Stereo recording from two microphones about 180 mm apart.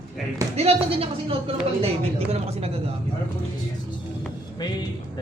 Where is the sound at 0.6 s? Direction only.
35° right (ahead or behind).